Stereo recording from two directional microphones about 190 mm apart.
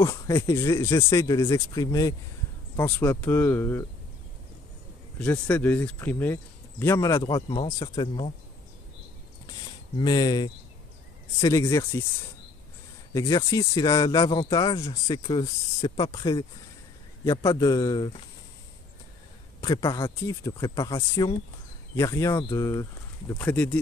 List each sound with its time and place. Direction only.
0.0 s speech: 15° left (ahead or behind)
5.2 s speech: 10° left (ahead or behind); by 8.3 s 25° left (ahead or behind)
9.9 s speech: 20° left (ahead or behind)
13.1 s speech: 20° left (ahead or behind)
19.6 s speech: 20° left (ahead or behind)